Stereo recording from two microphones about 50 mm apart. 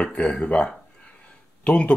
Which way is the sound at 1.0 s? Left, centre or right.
Left.